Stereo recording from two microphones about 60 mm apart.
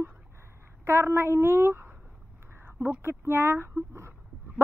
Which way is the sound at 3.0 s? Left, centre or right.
Right.